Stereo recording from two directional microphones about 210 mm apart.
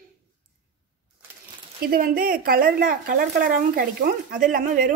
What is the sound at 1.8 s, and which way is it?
Speech, 45° right (ahead or behind).